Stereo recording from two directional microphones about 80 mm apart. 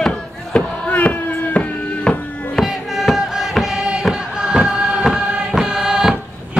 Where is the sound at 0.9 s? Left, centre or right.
Centre.